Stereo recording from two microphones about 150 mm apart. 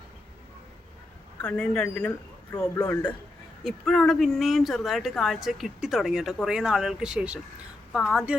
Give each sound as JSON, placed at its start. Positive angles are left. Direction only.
{"t": 1.5, "sound": "a man's voice", "side_deg": 5}